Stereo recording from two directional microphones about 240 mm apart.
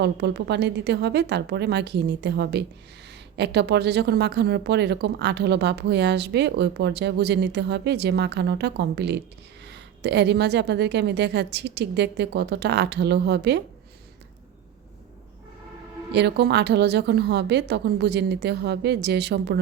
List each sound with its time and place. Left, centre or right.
0.0 s a woman's voice: right
16.1 s a woman's voice: right